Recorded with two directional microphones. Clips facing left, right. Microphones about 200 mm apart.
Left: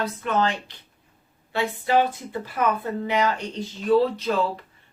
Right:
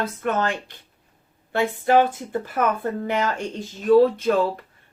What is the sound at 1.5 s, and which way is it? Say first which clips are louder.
Speech: right 3 dB; 50° right (ahead or behind).